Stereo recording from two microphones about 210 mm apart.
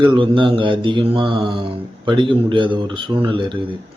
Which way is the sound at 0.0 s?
25° right (ahead or behind).